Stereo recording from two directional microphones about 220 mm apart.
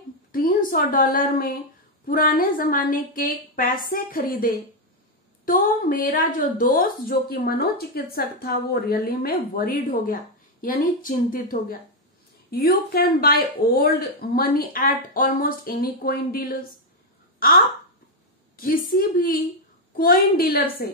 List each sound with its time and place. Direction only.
0.3 s a woman's voice: 40° left (ahead or behind)
17.4 s a sound: 40° left (ahead or behind)
18.6 s a woman's voice: 40° left (ahead or behind)